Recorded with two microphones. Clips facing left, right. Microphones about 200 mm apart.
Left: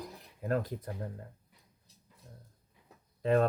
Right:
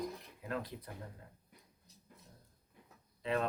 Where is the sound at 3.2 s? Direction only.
45° left (ahead or behind).